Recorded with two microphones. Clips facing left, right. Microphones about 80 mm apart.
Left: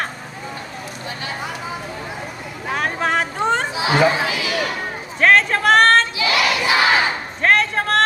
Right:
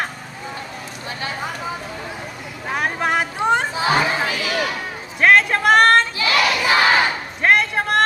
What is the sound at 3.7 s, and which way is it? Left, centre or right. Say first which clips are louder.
Chatter: left 2 dB; right.